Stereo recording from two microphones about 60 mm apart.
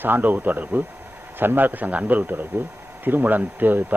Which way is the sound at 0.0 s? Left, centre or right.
Right.